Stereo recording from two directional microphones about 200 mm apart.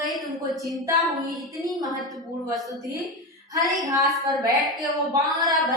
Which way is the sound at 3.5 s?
15° right (ahead or behind).